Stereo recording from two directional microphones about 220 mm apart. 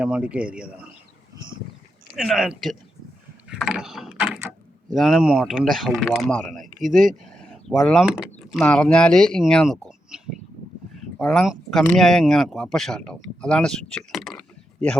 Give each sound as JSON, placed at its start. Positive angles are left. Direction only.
{"t": 0.0, "sound": "speech", "side_deg": -5}
{"t": 2.1, "sound": "speech", "side_deg": 0}
{"t": 3.6, "sound": "mechanisms", "side_deg": 0}
{"t": 4.9, "sound": "speech", "side_deg": 0}
{"t": 6.7, "sound": "speech", "side_deg": -40}
{"t": 7.3, "sound": "speech", "side_deg": 5}